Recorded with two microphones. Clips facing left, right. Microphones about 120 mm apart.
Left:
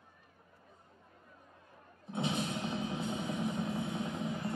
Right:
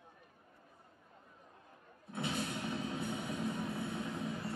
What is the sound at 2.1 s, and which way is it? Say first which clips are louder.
Music: left 3 dB; 20° left (ahead or behind).